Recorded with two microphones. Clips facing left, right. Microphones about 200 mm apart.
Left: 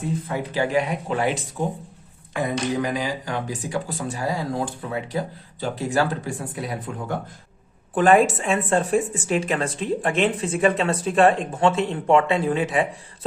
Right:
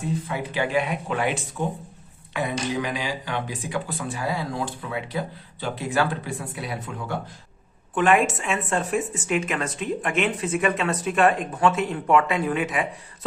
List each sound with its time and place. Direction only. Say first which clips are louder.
0.3 s a woman's voice: left 2 dB; 40° left (ahead or behind)
7.9 s a woman's voice: left 4 dB; 35° left (ahead or behind)